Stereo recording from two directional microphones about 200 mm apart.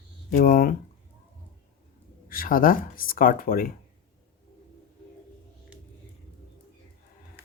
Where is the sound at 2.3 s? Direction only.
45° left (ahead or behind).